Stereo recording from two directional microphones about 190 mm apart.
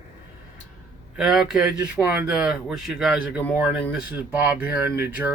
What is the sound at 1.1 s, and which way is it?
Speech, 5° right (ahead or behind).